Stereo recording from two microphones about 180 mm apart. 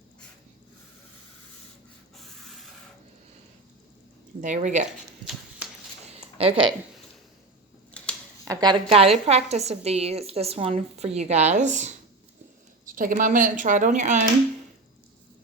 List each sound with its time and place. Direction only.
4.4 s a woman's voice: 40° right (ahead or behind)
6.4 s a woman's voice: 35° right (ahead or behind)
8.0 s a sound: 5° left (ahead or behind)
8.4 s a woman's voice: 25° right (ahead or behind); by 14.3 s 40° right (ahead or behind)